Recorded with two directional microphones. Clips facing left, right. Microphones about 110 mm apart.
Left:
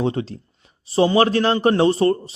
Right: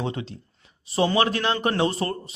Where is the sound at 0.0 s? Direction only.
35° left (ahead or behind).